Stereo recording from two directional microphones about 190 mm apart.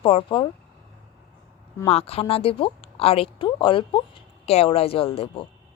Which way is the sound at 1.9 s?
30° left (ahead or behind).